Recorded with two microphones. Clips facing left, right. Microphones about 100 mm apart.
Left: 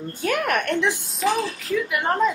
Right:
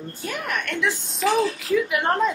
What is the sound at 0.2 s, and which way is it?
Speech, 65° left (ahead or behind).